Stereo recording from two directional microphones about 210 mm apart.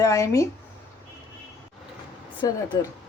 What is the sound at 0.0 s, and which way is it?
Speech, 15° left (ahead or behind).